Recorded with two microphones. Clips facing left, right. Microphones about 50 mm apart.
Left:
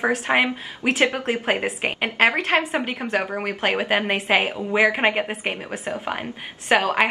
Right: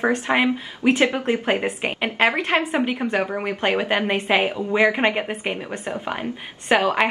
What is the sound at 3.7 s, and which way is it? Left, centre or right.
A woman's voice, centre.